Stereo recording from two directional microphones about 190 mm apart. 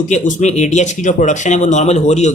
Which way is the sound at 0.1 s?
40° left (ahead or behind).